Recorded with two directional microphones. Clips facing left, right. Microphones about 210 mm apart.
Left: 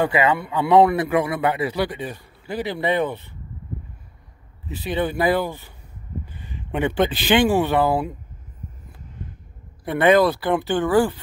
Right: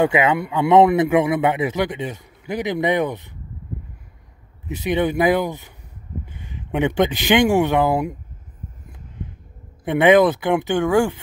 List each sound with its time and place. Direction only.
0.0 s speech: 20° right (ahead or behind)
4.6 s speech: 20° right (ahead or behind)
6.7 s speech: 15° right (ahead or behind)
9.8 s speech: 15° right (ahead or behind)